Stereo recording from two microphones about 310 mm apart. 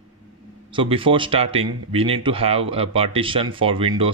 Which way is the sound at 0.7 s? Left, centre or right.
Centre.